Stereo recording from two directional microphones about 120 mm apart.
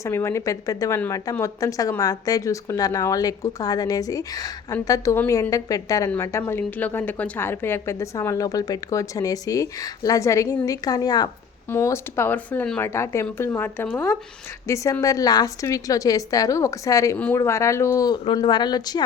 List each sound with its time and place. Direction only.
0.0 s speech: 20° left (ahead or behind)
11.7 s speech: 20° left (ahead or behind)